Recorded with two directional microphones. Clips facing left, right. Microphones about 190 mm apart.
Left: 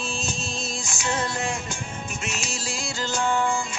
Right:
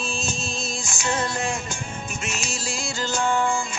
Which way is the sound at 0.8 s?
45° right (ahead or behind).